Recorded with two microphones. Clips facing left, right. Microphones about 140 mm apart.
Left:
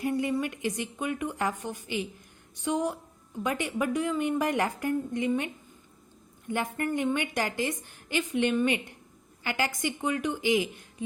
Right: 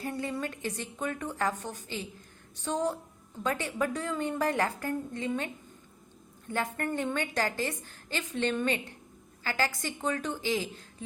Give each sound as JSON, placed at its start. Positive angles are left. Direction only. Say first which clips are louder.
{"t": 0.0, "sound": "a woman's voice", "louder": "left 6 dB", "side_deg": 15}
{"t": 6.5, "sound": "a woman's voice", "louder": "left 2 dB", "side_deg": 15}